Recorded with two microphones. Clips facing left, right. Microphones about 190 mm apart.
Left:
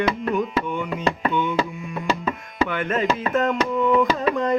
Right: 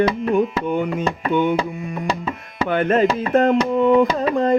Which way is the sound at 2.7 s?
35° right (ahead or behind).